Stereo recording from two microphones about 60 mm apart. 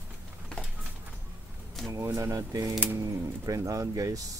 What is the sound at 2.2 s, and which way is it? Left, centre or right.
Speech, right.